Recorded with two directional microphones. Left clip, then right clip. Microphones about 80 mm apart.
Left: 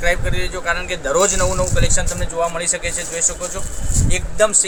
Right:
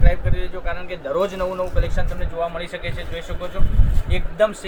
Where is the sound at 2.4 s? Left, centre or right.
Left.